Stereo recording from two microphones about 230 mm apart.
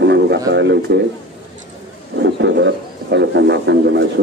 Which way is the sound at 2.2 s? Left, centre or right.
Right.